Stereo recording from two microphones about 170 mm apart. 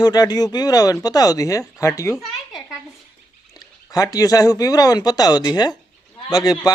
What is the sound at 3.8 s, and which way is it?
A man's voice, 20° left (ahead or behind).